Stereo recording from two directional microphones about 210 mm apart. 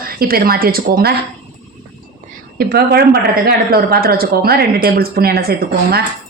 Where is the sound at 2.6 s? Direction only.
50° right (ahead or behind).